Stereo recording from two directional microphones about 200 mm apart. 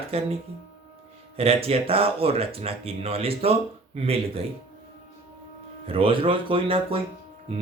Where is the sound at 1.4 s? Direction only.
30° right (ahead or behind).